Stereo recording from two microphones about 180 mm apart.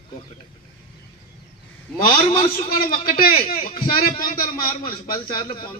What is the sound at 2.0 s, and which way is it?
A man's voice, 30° left (ahead or behind).